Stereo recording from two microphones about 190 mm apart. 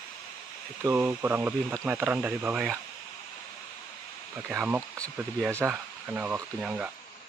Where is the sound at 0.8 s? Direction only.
10° right (ahead or behind).